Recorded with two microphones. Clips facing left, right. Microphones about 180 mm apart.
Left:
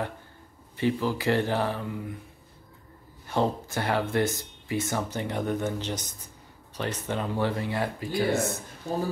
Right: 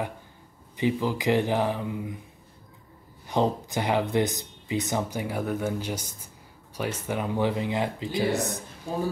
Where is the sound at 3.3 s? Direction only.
15° right (ahead or behind).